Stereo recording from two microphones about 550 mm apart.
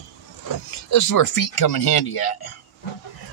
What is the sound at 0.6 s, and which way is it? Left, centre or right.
Speech, left.